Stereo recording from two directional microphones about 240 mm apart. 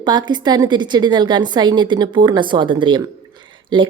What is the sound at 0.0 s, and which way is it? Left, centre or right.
A woman's voice, centre.